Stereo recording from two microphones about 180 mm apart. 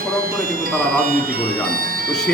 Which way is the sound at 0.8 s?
50° right (ahead or behind).